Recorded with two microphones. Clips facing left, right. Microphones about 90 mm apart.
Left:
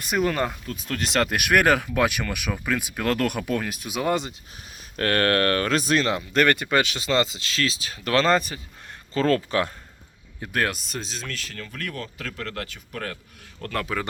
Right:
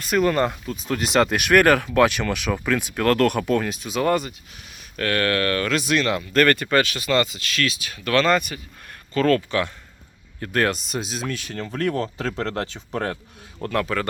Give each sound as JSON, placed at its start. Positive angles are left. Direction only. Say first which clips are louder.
{"t": 0.1, "sound": "speech", "louder": "right 4 dB", "side_deg": 5}
{"t": 4.1, "sound": "speech", "louder": "right 1 dB", "side_deg": 20}
{"t": 4.9, "sound": "speech", "louder": "left 1 dB", "side_deg": 40}
{"t": 10.4, "sound": "speech", "louder": "right 4 dB", "side_deg": 5}
{"t": 11.5, "sound": "speech", "louder": "right 13 dB", "side_deg": -35}
{"t": 13.6, "sound": "speech", "louder": "right 4 dB", "side_deg": -5}